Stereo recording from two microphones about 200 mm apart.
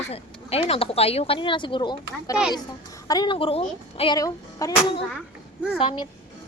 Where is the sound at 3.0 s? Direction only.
20° left (ahead or behind).